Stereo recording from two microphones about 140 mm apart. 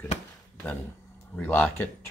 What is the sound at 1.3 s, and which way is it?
Speech, 15° left (ahead or behind).